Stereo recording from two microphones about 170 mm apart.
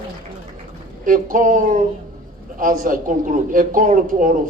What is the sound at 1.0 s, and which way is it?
A man's voice, 50° right (ahead or behind).